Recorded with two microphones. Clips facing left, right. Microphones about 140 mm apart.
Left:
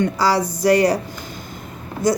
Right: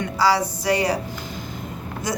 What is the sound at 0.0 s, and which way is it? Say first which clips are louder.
Speech: left 2 dB; 45° left (ahead or behind).